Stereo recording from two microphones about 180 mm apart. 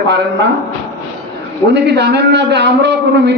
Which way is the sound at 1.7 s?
70° right (ahead or behind).